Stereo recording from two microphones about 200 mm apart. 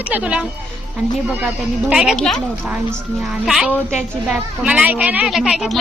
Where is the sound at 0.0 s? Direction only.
5° right (ahead or behind).